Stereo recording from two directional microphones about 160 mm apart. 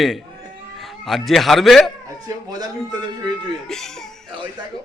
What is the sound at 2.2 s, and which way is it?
Speech, 25° right (ahead or behind).